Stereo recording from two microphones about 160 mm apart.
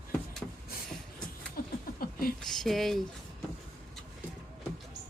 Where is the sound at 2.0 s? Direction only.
65° left (ahead or behind).